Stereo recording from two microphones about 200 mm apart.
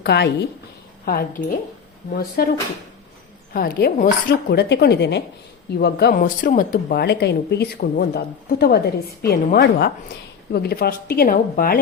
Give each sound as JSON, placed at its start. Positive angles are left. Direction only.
{"t": 0.0, "sound": "a woman's voice", "side_deg": 55}
{"t": 3.5, "sound": "a woman's voice", "side_deg": 50}